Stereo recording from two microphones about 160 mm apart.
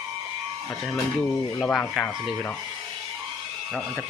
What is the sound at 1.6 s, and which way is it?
Speech, 5° left (ahead or behind).